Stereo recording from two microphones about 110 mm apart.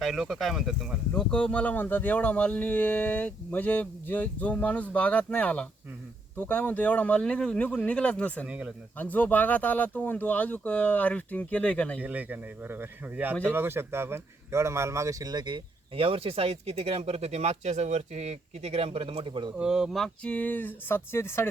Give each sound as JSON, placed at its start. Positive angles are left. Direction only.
{"t": 0.0, "sound": "speech", "side_deg": 0}
{"t": 1.1, "sound": "speech", "side_deg": 10}
{"t": 8.4, "sound": "a man's voice", "side_deg": -10}
{"t": 9.0, "sound": "speech", "side_deg": 15}
{"t": 11.9, "sound": "a man's voice", "side_deg": -15}
{"t": 19.5, "sound": "speech", "side_deg": -5}
{"t": 20.3, "sound": "speech", "side_deg": 15}